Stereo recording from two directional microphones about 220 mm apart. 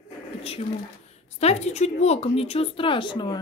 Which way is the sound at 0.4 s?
25° left (ahead or behind).